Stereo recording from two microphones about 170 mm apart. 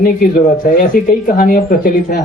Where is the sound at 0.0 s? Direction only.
60° left (ahead or behind).